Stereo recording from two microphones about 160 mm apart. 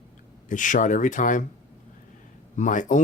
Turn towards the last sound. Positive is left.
turn(degrees=55)  # may be behind; listen again after turning